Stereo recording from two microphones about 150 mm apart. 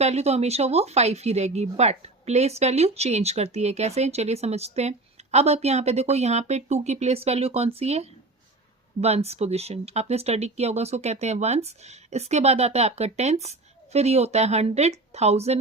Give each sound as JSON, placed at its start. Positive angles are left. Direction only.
{"t": 0.0, "sound": "speech", "side_deg": -45}